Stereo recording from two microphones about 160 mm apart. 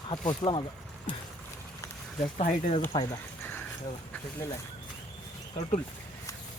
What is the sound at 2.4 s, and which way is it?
Speech, 50° left (ahead or behind).